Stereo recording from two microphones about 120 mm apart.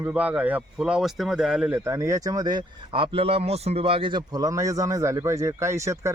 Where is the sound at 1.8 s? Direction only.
25° right (ahead or behind); by 4.2 s 45° right (ahead or behind).